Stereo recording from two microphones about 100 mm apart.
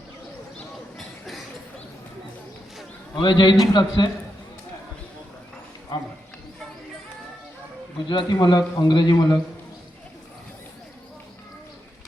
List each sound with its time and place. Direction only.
3.2 s a man's voice: 50° left (ahead or behind)
8.0 s a man's voice: 45° left (ahead or behind)